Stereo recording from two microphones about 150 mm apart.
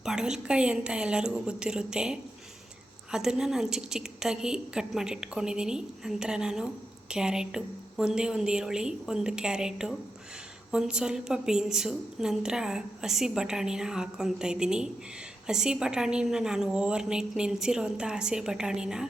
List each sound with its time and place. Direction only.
0.0 s a woman's voice: 5° right (ahead or behind)